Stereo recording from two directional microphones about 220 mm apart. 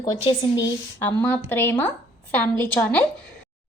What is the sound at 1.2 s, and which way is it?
A woman's voice, 10° left (ahead or behind).